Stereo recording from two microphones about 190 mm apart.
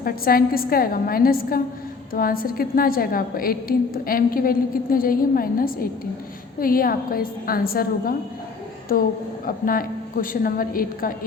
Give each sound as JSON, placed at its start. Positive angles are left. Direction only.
{"t": 0.0, "sound": "a woman's voice", "side_deg": 50}